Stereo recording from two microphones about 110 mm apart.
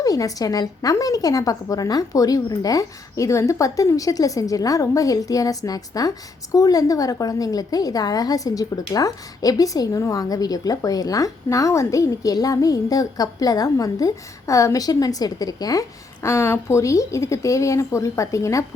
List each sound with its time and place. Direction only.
0.0 s a woman's voice: 30° left (ahead or behind)